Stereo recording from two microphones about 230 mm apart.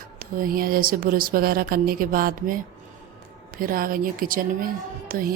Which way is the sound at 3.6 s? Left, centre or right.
Right.